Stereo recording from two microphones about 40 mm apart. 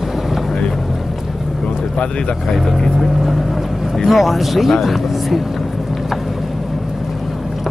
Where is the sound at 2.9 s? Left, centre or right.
Centre.